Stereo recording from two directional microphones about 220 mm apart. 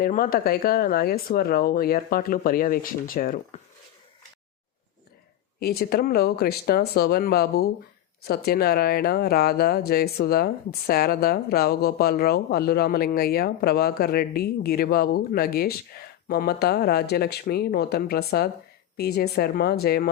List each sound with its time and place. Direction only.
0.0 s speech: 40° left (ahead or behind)
5.5 s speech: 45° left (ahead or behind)